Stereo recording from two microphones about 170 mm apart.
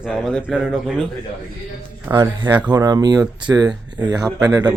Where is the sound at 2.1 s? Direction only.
25° right (ahead or behind).